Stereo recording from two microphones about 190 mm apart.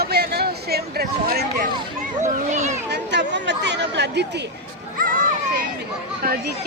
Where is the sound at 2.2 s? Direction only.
40° right (ahead or behind).